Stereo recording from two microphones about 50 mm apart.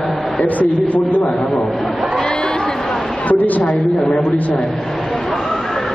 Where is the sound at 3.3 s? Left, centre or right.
Left.